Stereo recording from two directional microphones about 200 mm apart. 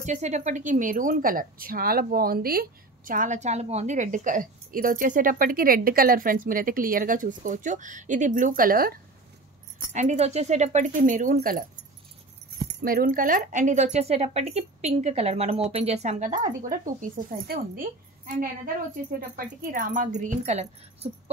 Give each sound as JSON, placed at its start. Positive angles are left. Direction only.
{"t": 0.0, "sound": "a woman's voice", "side_deg": -35}
{"t": 9.9, "sound": "speech", "side_deg": -35}